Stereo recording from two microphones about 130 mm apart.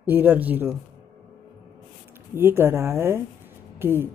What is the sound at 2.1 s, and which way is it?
Speech, 15° right (ahead or behind).